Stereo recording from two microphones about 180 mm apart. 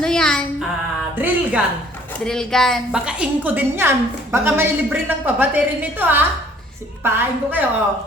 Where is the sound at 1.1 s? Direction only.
10° right (ahead or behind).